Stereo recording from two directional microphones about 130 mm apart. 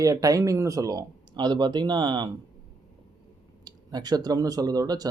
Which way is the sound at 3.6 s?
30° right (ahead or behind).